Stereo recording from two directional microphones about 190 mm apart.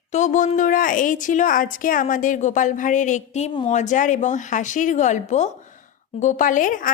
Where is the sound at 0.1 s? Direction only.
40° left (ahead or behind).